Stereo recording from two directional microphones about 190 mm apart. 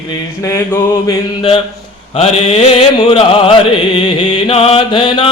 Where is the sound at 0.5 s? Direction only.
15° left (ahead or behind).